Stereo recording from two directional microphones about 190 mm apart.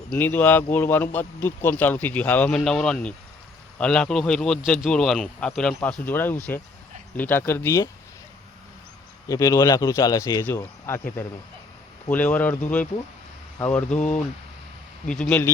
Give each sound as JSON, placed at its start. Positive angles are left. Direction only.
{"t": 0.1, "sound": "speech", "side_deg": 10}
{"t": 9.3, "sound": "speech", "side_deg": 15}
{"t": 12.0, "sound": "speech", "side_deg": 10}
{"t": 15.2, "sound": "speech", "side_deg": 10}